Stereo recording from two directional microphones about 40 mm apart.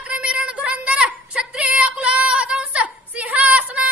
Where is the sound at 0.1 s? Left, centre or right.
Right.